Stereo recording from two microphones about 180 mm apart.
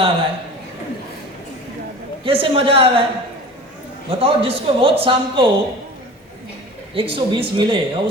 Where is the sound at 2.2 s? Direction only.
30° right (ahead or behind).